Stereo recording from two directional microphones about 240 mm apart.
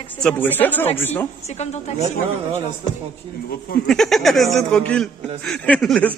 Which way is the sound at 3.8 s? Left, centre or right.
Centre.